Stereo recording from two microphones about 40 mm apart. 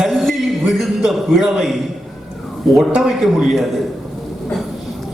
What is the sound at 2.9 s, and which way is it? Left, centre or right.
Speech, centre.